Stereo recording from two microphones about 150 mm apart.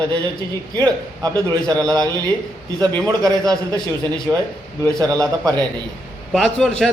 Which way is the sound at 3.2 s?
25° right (ahead or behind).